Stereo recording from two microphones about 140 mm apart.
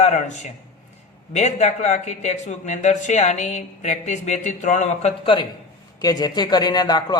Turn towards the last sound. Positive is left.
turn(degrees=30)  # may be behind; listen again after turning